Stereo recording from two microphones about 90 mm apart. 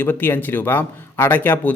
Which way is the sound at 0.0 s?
20° left (ahead or behind).